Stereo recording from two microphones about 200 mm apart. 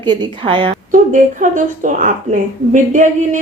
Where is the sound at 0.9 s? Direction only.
40° right (ahead or behind).